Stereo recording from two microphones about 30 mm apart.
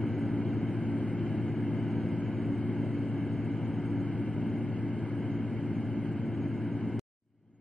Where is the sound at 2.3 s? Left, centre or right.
Centre.